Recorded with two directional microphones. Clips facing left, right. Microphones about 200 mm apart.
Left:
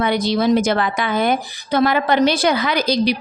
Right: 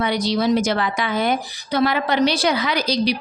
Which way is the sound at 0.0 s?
55° left (ahead or behind).